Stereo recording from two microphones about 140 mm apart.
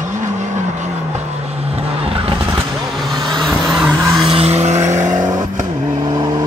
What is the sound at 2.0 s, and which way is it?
Vehicle, 40° right (ahead or behind).